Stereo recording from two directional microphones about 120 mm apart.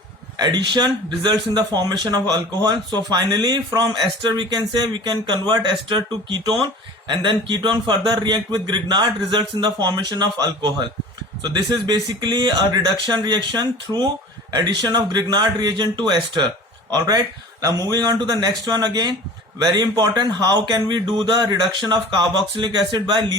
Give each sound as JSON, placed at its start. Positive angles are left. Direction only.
{"t": 0.3, "sound": "speech", "side_deg": -35}